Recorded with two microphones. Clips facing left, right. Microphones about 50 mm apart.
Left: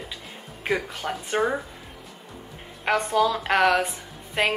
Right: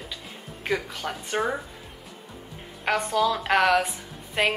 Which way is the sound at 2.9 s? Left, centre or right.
Centre.